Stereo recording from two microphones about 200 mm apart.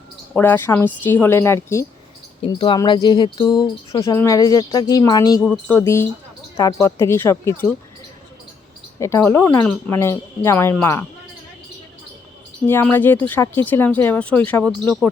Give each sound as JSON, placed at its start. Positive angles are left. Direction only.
{"t": 0.3, "sound": "speech", "side_deg": 10}
{"t": 9.0, "sound": "speech", "side_deg": 10}
{"t": 12.6, "sound": "speech", "side_deg": 10}